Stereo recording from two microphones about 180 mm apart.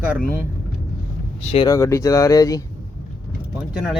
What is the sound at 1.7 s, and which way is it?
Speech, 15° left (ahead or behind).